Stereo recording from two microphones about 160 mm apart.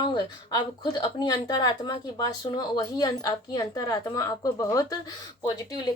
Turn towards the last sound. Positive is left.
turn(degrees=25)  # may be behind; listen again after turning